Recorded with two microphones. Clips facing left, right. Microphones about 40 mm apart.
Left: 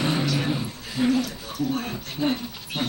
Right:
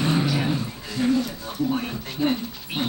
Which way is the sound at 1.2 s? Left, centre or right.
Right.